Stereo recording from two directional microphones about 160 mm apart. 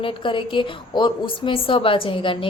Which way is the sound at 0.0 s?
35° left (ahead or behind).